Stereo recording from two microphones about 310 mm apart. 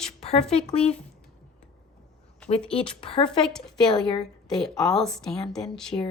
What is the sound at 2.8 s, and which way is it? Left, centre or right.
Speech, centre.